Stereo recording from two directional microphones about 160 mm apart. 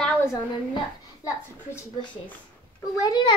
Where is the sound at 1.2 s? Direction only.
15° left (ahead or behind).